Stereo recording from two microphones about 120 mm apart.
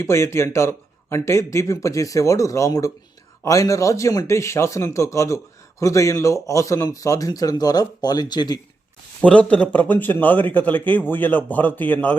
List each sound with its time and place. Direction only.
0.0 s a man's voice: 25° left (ahead or behind)
9.2 s a man's voice: 10° left (ahead or behind)